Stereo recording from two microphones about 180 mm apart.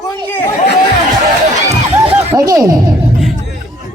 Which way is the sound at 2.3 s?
20° right (ahead or behind).